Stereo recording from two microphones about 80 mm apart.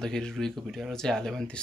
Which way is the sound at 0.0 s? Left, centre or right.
Centre.